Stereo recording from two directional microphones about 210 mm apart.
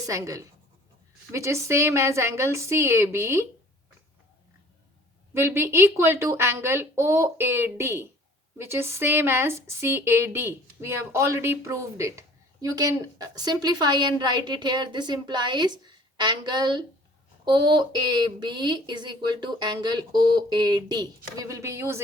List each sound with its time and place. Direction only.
0.0 s speech: 15° right (ahead or behind)
5.3 s a woman's voice: 10° right (ahead or behind)